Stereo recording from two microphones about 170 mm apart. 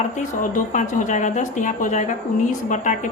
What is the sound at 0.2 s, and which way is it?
Speech, 50° left (ahead or behind).